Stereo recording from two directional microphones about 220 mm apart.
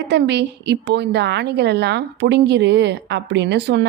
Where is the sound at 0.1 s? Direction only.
50° right (ahead or behind).